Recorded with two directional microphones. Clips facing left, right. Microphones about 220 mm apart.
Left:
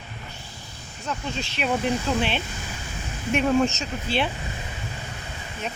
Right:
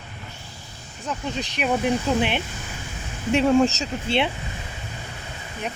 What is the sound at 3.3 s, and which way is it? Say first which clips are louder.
Speech: right 3 dB; 25° right (ahead or behind).